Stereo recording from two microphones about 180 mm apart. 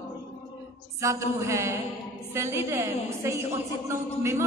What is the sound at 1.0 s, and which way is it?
A woman's voice, 15° right (ahead or behind).